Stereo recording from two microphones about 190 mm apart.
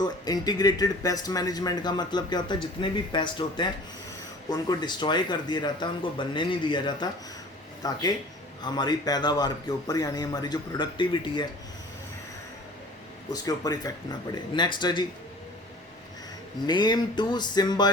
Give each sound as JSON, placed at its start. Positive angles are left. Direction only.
{"t": 0.0, "sound": "speech", "side_deg": 20}
{"t": 13.3, "sound": "speech", "side_deg": 20}
{"t": 16.6, "sound": "speech", "side_deg": 25}